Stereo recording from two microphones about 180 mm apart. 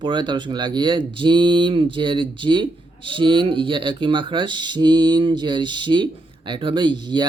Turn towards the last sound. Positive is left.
turn(degrees=-25)  # may be behind; listen again after turning